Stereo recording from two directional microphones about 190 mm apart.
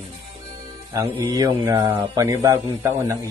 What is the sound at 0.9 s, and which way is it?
Speech, 20° right (ahead or behind).